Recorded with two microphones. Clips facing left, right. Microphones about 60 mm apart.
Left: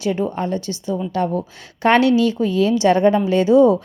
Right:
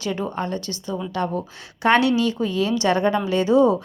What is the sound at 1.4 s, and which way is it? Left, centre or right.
Speech, left.